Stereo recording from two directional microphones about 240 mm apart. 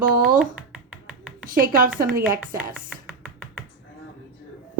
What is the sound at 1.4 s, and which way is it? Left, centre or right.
Speech, right.